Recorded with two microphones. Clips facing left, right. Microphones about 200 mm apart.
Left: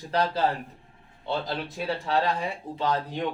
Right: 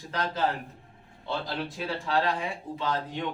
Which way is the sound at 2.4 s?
35° left (ahead or behind).